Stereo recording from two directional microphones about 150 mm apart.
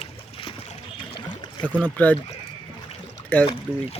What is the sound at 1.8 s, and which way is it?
Speech, 10° left (ahead or behind).